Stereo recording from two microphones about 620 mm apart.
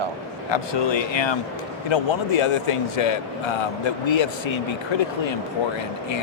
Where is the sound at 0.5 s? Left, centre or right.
Left.